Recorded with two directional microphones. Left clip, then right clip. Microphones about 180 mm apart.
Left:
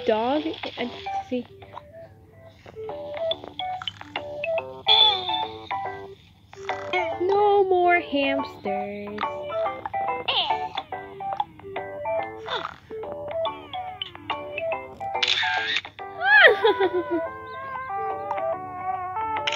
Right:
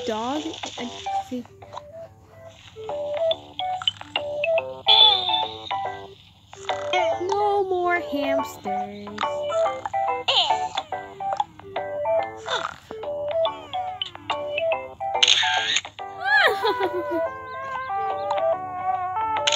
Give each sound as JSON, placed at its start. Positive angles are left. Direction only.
{"t": 0.0, "sound": "speech", "side_deg": -30}
{"t": 2.8, "sound": "music", "side_deg": -30}
{"t": 6.6, "sound": "a sound", "side_deg": -30}